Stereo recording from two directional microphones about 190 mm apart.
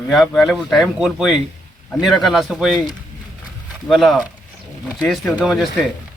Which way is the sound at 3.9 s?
Centre (ahead or behind).